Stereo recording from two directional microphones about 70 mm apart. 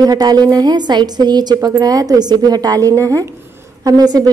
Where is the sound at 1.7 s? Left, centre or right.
Right.